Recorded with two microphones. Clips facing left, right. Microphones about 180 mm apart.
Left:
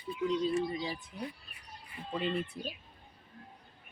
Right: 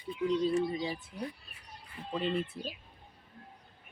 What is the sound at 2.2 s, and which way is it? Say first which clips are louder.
Speech: right 1 dB; centre (ahead or behind).